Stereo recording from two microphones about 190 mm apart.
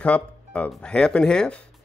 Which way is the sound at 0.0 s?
5° left (ahead or behind).